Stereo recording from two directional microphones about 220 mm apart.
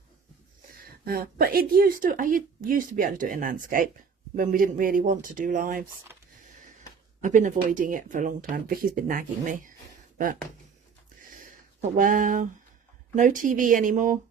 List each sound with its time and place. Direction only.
1.0 s speech: 40° right (ahead or behind)
7.2 s speech: 35° right (ahead or behind)
11.3 s a sound: 40° right (ahead or behind)
13.1 s speech: 35° right (ahead or behind)